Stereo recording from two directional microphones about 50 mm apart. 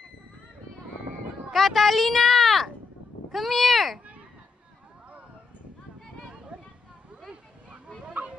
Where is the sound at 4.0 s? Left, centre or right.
Right.